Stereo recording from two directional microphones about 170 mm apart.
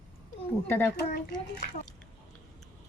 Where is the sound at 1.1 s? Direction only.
70° left (ahead or behind).